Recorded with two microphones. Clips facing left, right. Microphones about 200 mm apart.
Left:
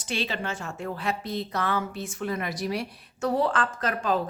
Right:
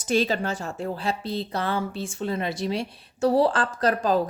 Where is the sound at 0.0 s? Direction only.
45° right (ahead or behind).